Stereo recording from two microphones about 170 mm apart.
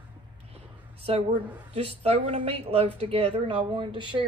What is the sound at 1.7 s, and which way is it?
A woman's voice, 35° right (ahead or behind).